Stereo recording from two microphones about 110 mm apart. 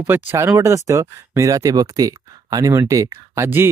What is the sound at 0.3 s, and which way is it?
Speech, 25° right (ahead or behind).